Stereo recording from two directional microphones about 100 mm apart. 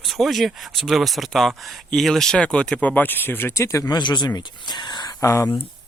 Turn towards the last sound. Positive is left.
turn(degrees=30)  # may be behind; listen again after turning